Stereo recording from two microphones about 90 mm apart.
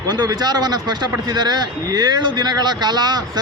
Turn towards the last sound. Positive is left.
turn(degrees=-50)  # may be behind; listen again after turning